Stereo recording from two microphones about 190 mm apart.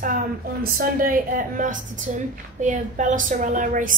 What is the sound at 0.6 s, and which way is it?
A woman's voice, 50° right (ahead or behind).